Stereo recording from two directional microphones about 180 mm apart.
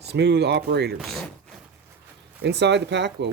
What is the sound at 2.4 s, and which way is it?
Speech, 75° right (ahead or behind).